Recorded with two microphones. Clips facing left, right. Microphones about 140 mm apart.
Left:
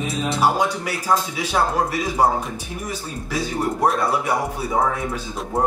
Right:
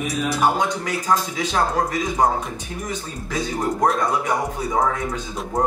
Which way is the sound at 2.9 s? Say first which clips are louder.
Left 1 dB; 10° left (ahead or behind).